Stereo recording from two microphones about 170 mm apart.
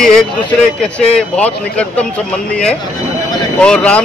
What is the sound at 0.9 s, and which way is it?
Speech, 5° left (ahead or behind).